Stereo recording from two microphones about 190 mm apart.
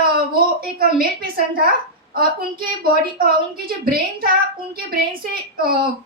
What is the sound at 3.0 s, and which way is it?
A child's voice, 50° right (ahead or behind).